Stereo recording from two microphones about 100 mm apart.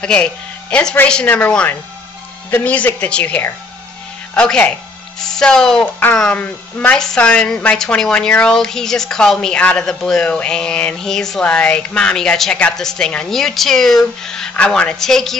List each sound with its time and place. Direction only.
0.0 s speech: 10° left (ahead or behind)